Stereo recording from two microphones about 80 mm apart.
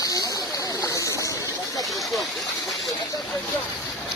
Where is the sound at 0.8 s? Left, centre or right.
Left.